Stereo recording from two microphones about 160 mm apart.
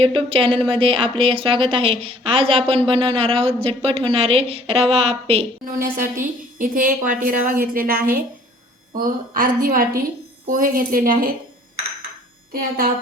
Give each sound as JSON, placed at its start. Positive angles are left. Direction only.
{"t": 0.0, "sound": "speech", "side_deg": -35}
{"t": 5.6, "sound": "a woman's voice", "side_deg": -60}
{"t": 12.5, "sound": "a woman's voice", "side_deg": -65}